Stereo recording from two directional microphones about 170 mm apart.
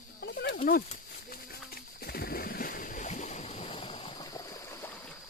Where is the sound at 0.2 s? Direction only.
75° left (ahead or behind).